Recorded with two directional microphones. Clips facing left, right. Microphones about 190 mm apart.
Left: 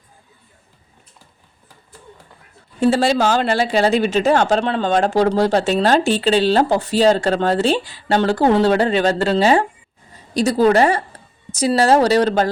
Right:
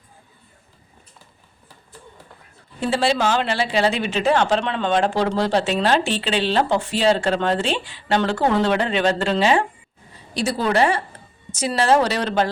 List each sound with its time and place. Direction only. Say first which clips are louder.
2.8 s speech: left 5 dB; 45° left (ahead or behind)